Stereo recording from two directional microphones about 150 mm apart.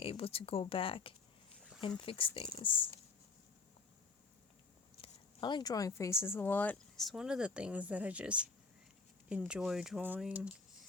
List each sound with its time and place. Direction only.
0.0 s speech: 40° left (ahead or behind)
4.9 s speech: 35° left (ahead or behind); by 10.5 s 10° right (ahead or behind)